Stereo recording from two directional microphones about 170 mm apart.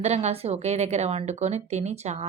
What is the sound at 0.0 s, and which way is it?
A woman's voice, 40° right (ahead or behind).